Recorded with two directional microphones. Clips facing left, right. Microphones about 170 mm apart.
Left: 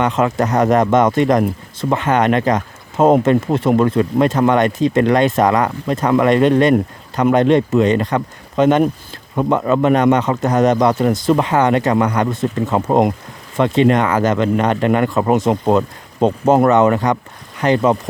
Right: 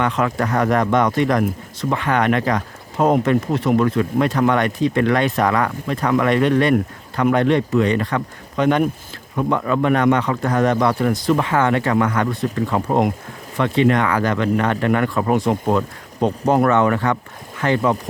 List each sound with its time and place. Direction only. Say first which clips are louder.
0.0 s speech: left 4 dB; 25° left (ahead or behind)